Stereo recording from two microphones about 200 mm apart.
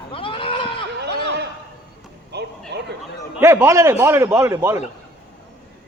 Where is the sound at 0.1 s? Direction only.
25° left (ahead or behind).